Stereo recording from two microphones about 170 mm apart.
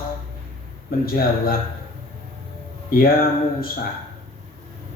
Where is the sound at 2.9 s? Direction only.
60° left (ahead or behind).